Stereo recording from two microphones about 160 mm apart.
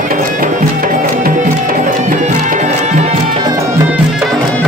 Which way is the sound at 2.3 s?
55° right (ahead or behind).